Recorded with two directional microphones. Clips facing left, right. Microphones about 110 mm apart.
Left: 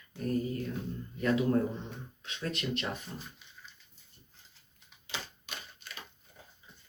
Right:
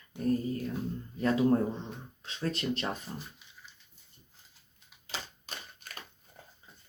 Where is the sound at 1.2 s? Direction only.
30° right (ahead or behind).